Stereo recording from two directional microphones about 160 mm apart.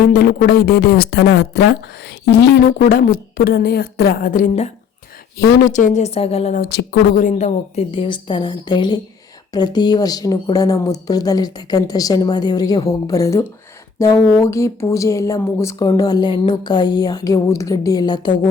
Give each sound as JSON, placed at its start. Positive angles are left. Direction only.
{"t": 0.1, "sound": "speech", "side_deg": 75}
{"t": 5.7, "sound": "a woman's voice", "side_deg": 50}
{"t": 6.6, "sound": "speech", "side_deg": 80}
{"t": 7.3, "sound": "a woman's voice", "side_deg": 45}
{"t": 7.9, "sound": "speech", "side_deg": 30}